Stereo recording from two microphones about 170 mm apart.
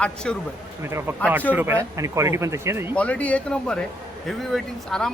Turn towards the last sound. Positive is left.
turn(degrees=0)  # may be behind; listen again after turning